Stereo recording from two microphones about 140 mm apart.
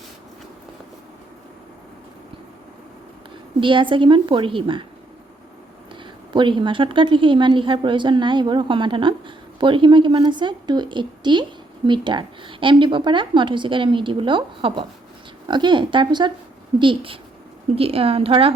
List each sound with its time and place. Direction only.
3.6 s a woman's voice: 35° right (ahead or behind)
6.3 s a woman's voice: 35° right (ahead or behind)